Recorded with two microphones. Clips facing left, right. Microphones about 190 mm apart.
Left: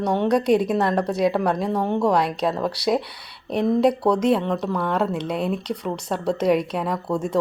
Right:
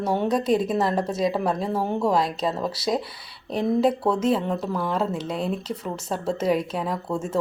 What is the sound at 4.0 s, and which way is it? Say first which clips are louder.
Speech: left 3 dB; 5° right (ahead or behind).